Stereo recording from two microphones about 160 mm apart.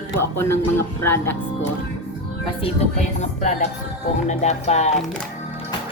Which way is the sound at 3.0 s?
45° left (ahead or behind).